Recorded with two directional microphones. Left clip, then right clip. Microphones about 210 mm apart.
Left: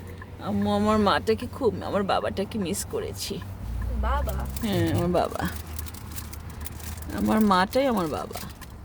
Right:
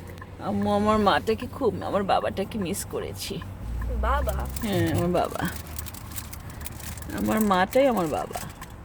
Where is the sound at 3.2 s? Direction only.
35° left (ahead or behind).